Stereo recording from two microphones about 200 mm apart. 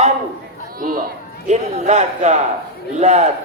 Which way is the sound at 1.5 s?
35° right (ahead or behind).